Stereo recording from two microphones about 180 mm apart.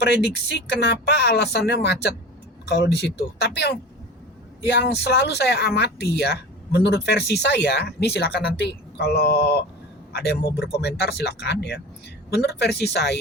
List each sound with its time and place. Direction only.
0.0 s speech: 65° left (ahead or behind)